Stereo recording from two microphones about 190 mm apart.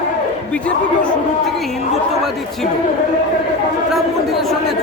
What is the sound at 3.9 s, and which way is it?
Speech, centre (ahead or behind).